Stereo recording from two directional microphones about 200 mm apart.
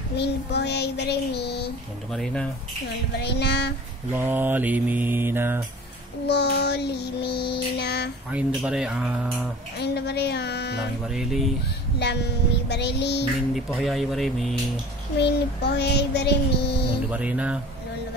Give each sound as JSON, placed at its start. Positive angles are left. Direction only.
{"t": 0.1, "sound": "child singing", "side_deg": 55}
{"t": 3.2, "sound": "child singing", "side_deg": 55}
{"t": 4.1, "sound": "mantra", "side_deg": -10}
{"t": 6.2, "sound": "child singing", "side_deg": 55}
{"t": 8.3, "sound": "speech", "side_deg": -5}
{"t": 9.8, "sound": "child singing", "side_deg": 55}
{"t": 11.1, "sound": "speech", "side_deg": 0}
{"t": 12.6, "sound": "child singing", "side_deg": 55}
{"t": 13.7, "sound": "speech", "side_deg": 0}
{"t": 15.1, "sound": "child singing", "side_deg": 55}
{"t": 17.1, "sound": "mantra", "side_deg": -5}